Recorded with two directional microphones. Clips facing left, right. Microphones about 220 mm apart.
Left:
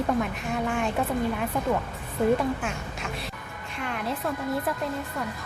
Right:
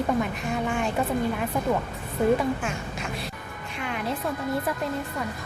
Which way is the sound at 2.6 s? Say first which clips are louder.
Right 1 dB; centre (ahead or behind).